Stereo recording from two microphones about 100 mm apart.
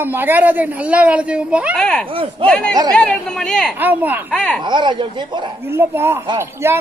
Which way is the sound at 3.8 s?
20° right (ahead or behind).